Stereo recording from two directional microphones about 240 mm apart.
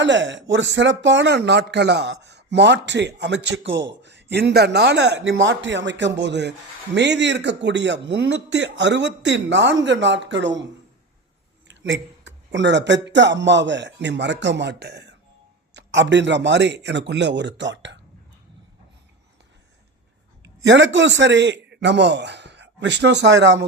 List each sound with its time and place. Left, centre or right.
0.0 s a man's voice: right
11.7 s a man's voice: right
20.4 s a man's voice: right